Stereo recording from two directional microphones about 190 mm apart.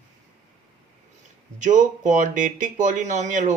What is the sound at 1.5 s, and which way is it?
Speech, 40° right (ahead or behind).